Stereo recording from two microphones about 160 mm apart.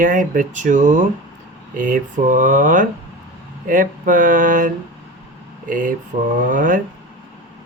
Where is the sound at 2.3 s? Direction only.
55° right (ahead or behind).